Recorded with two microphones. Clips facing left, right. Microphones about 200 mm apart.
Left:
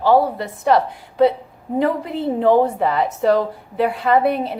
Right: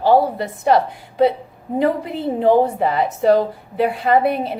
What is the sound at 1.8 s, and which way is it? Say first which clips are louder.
A woman's voice: right 1 dB; 15° right (ahead or behind).